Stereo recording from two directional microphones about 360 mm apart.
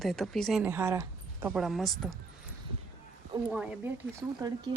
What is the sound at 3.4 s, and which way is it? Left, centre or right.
Speech, centre.